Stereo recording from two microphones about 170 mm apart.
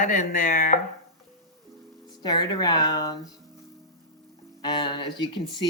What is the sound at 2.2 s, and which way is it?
Speech, 25° left (ahead or behind).